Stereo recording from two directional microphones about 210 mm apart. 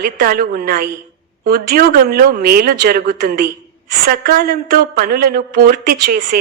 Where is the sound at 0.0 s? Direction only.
45° right (ahead or behind).